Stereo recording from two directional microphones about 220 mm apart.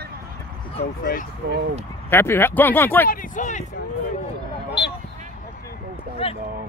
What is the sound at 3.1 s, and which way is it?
Speech, 35° left (ahead or behind).